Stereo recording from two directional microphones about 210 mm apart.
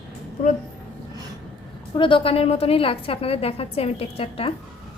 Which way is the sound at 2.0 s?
25° left (ahead or behind).